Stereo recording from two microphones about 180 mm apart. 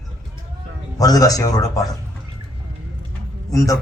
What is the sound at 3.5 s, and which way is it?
Speech, 20° left (ahead or behind).